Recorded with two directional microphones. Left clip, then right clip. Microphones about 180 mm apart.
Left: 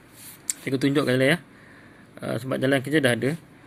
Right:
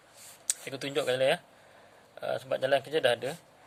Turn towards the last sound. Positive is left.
turn(degrees=30)  # may be behind; listen again after turning